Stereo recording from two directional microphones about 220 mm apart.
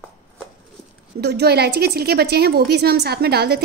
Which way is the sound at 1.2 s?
50° right (ahead or behind).